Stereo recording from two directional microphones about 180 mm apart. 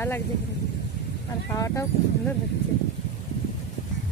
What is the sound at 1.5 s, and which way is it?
Speech, 15° left (ahead or behind).